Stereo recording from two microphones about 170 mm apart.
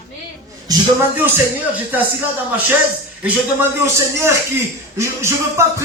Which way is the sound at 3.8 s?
15° right (ahead or behind).